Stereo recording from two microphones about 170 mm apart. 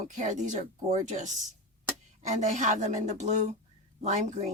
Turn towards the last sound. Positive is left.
turn(degrees=-45)  # may be behind; listen again after turning